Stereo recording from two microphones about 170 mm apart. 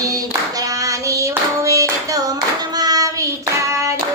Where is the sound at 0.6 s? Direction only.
20° right (ahead or behind).